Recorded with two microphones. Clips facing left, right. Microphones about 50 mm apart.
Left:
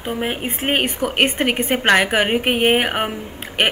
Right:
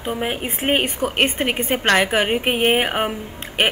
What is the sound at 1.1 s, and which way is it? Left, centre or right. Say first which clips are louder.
A woman's voice: left 4 dB; centre.